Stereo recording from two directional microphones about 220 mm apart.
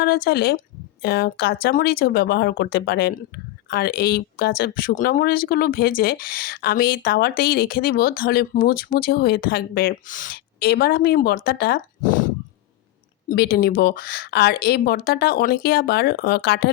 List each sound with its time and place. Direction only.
0.0 s speech: 45° left (ahead or behind)